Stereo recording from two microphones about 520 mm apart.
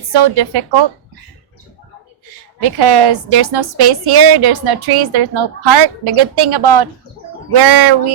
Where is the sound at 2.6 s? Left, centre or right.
Right.